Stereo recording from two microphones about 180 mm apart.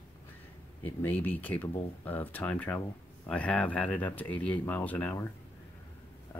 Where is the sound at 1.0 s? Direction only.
10° left (ahead or behind).